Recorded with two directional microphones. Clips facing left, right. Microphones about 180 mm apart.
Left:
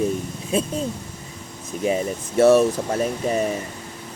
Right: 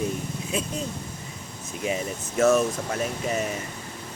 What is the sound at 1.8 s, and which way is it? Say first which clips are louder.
Speech: left 6 dB; 35° left (ahead or behind).